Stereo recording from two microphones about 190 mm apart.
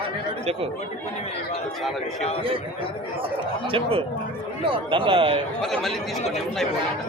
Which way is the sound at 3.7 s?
30° right (ahead or behind).